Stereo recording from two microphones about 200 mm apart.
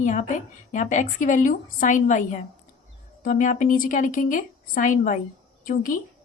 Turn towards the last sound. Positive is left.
turn(degrees=45)  # may be behind; listen again after turning